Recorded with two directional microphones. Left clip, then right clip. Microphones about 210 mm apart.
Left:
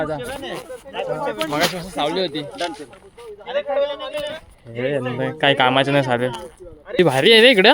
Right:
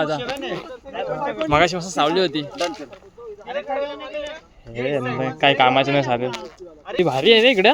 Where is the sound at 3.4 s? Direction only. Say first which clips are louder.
Left 4 dB; 55° left (ahead or behind).